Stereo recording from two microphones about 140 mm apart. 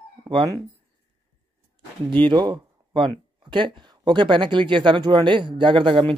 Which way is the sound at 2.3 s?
35° right (ahead or behind).